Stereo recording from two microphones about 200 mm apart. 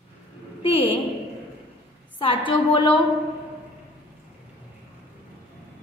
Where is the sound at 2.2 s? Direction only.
25° left (ahead or behind).